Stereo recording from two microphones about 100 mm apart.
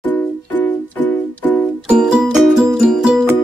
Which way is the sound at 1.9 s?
5° right (ahead or behind).